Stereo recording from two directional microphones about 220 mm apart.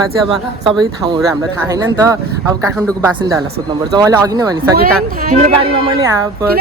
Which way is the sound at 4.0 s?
15° right (ahead or behind).